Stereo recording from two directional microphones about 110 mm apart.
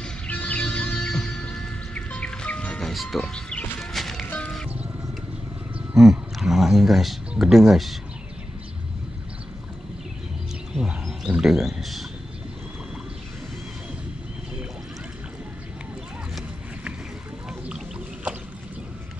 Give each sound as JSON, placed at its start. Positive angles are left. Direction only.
{"t": 0.0, "sound": "music", "side_deg": 10}
{"t": 5.9, "sound": "speech", "side_deg": 0}
{"t": 10.8, "sound": "a sound", "side_deg": -5}